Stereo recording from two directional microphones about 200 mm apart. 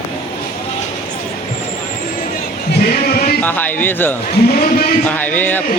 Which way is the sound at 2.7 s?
50° left (ahead or behind).